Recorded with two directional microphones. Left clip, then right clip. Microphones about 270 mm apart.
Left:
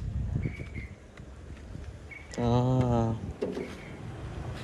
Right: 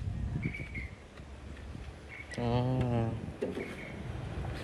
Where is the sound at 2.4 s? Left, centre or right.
Centre.